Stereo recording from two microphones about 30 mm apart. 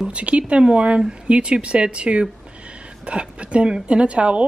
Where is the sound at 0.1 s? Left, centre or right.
Right.